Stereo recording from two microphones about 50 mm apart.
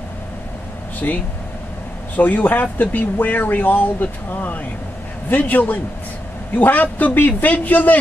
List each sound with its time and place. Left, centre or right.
2.1 s speech: left